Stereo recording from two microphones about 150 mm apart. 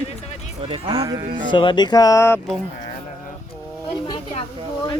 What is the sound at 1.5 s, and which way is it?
Speech, 35° left (ahead or behind).